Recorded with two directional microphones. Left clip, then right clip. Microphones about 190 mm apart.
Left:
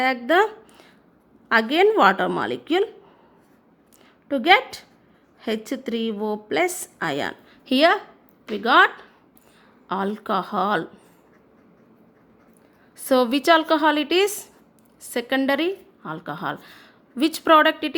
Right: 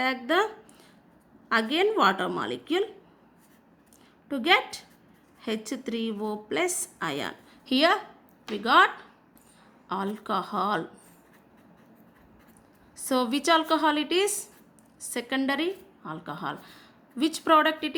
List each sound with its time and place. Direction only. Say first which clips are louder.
0.0 s a woman's voice: left 6 dB; 25° left (ahead or behind)
4.3 s a woman's voice: left 6 dB; 20° left (ahead or behind)
9.9 s a woman's voice: left 5 dB; 25° left (ahead or behind)
13.1 s a woman's voice: left 7 dB; 20° left (ahead or behind)